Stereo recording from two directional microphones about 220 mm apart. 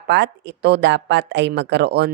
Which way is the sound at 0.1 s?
50° right (ahead or behind).